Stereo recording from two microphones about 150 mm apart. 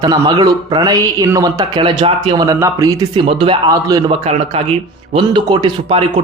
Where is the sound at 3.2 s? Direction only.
35° right (ahead or behind).